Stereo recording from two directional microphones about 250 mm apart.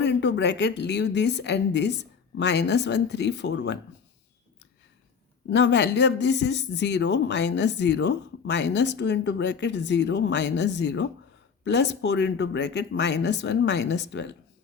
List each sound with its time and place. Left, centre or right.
0.0 s speech: left
5.5 s speech: left